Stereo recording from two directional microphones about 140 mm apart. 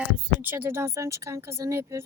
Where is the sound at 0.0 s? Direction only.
15° right (ahead or behind).